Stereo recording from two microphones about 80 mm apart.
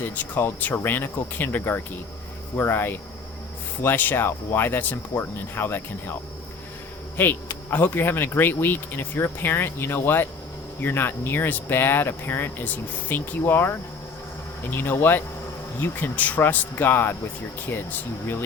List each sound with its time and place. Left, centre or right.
0.0 s speech: left
7.2 s speech: left